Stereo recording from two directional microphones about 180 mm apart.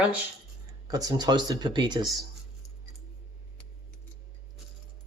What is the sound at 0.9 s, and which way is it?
Speech, 20° right (ahead or behind).